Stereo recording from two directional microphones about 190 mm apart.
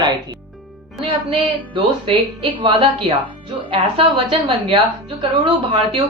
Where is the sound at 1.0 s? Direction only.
30° right (ahead or behind).